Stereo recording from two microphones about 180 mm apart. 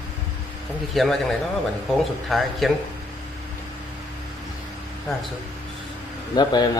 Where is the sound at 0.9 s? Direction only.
Centre (ahead or behind).